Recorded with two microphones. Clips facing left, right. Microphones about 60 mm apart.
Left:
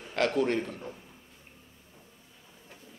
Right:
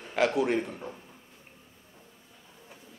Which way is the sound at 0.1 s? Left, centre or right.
Centre.